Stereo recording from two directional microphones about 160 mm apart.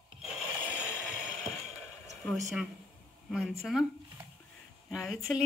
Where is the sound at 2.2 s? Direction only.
Centre (ahead or behind).